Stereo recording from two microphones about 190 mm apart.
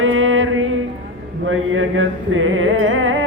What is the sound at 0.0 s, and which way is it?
Mantra, 90° right.